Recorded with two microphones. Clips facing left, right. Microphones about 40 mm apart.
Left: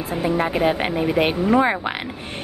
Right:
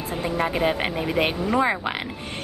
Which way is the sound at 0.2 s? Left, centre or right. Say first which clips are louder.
Left 3 dB; centre.